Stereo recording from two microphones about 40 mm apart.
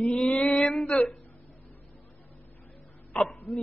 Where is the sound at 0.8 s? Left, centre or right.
Centre.